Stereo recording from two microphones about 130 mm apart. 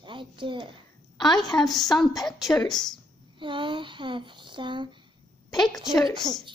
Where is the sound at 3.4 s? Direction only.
40° right (ahead or behind).